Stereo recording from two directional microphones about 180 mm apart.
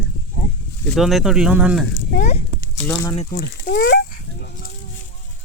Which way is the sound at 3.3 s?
60° left (ahead or behind).